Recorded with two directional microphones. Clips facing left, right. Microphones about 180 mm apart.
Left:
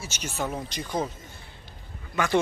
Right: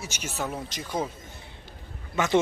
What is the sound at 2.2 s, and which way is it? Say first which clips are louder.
Speech: even; 25° right (ahead or behind).